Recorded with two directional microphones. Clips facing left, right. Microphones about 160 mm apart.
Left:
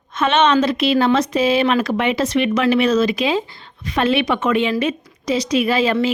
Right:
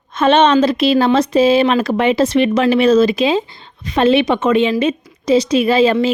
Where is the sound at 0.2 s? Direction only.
35° right (ahead or behind).